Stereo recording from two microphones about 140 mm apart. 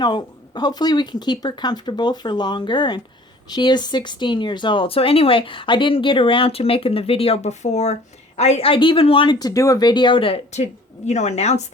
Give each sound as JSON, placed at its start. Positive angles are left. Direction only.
{"t": 0.0, "sound": "speech", "side_deg": 30}
{"t": 10.5, "sound": "a woman's voice", "side_deg": 55}